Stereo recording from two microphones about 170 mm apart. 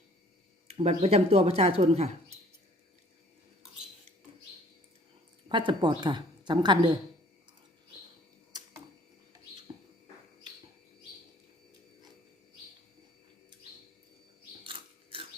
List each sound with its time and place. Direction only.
0.7 s speech: 40° right (ahead or behind)
5.5 s a woman's voice: 30° right (ahead or behind)
9.7 s bird: 25° right (ahead or behind)
14.6 s a sound: 30° right (ahead or behind)